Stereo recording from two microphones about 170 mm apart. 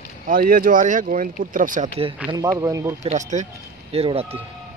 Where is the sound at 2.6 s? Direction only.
20° right (ahead or behind).